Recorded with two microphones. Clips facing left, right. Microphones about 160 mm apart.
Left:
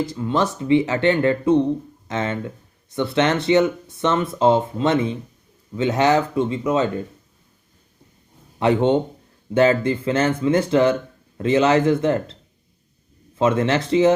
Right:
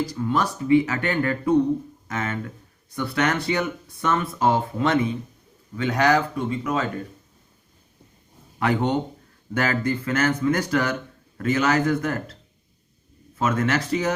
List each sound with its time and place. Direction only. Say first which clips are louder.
0.0 s speech: left 3 dB; 25° left (ahead or behind)
8.5 s speech: left 5 dB; 25° left (ahead or behind)
13.4 s speech: left 4 dB; 30° left (ahead or behind)